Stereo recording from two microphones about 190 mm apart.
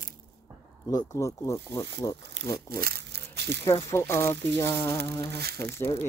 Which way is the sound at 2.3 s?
55° right (ahead or behind).